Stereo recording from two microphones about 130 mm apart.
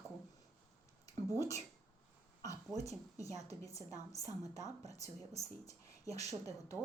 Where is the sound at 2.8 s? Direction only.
25° left (ahead or behind).